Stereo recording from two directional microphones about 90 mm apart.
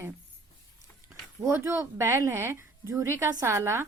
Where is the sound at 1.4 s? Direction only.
35° right (ahead or behind).